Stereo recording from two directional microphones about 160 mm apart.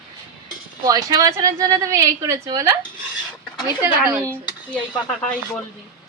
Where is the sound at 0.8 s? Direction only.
25° right (ahead or behind).